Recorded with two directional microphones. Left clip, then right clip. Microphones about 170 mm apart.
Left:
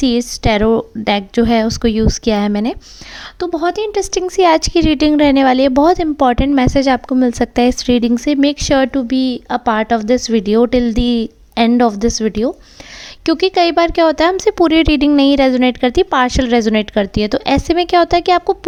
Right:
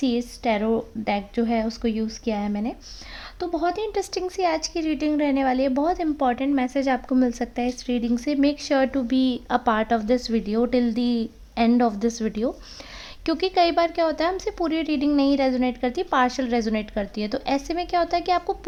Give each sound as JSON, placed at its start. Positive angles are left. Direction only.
{"t": 0.0, "sound": "a woman's voice", "side_deg": 35}
{"t": 4.3, "sound": "a woman's voice", "side_deg": 45}